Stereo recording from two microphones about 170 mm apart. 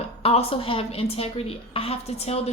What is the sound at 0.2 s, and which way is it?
A woman's voice, 35° left (ahead or behind).